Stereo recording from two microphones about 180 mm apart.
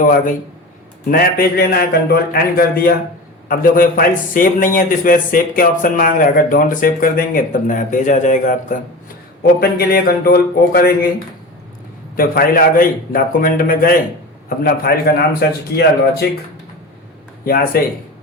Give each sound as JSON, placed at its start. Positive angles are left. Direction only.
{"t": 0.0, "sound": "a man's voice", "side_deg": 50}
{"t": 9.6, "sound": "a man's voice", "side_deg": 55}
{"t": 12.1, "sound": "a man's voice", "side_deg": 50}
{"t": 17.4, "sound": "a man's voice", "side_deg": 55}